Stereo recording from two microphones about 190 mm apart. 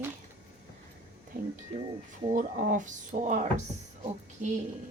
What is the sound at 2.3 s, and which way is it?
Speech, 45° right (ahead or behind).